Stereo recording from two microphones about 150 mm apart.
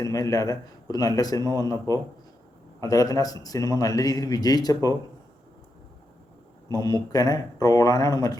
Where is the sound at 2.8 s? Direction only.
25° left (ahead or behind).